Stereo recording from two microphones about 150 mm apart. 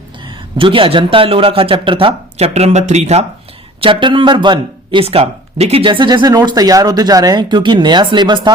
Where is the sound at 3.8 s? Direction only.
35° right (ahead or behind).